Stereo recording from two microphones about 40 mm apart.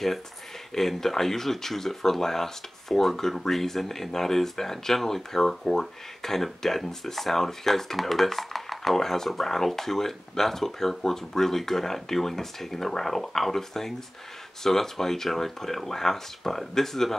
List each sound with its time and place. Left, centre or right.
0.7 s speech: centre